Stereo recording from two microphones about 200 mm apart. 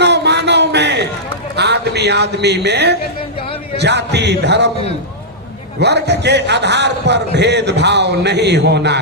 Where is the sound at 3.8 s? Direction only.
60° right (ahead or behind).